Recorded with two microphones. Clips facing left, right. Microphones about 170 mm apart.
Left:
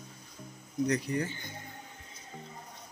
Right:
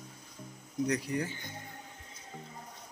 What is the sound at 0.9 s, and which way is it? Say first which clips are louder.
Speech: left 1 dB; 10° right (ahead or behind).